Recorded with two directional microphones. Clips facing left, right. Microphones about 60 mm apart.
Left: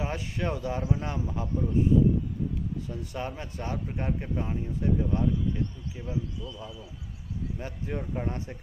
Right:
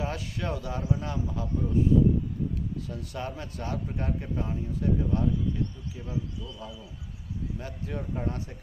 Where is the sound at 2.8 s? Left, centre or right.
Left.